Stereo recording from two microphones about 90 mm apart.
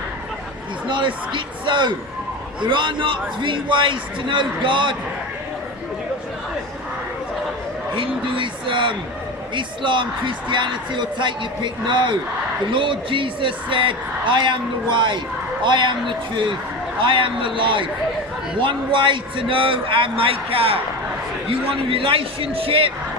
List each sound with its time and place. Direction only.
0.9 s a man's voice: 60° right (ahead or behind)
7.9 s a man's voice: 65° right (ahead or behind); by 22.9 s 90° right